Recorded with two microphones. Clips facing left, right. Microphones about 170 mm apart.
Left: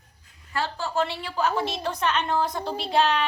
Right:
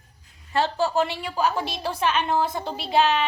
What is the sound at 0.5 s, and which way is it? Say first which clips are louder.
A woman's voice: right 4 dB; 25° right (ahead or behind).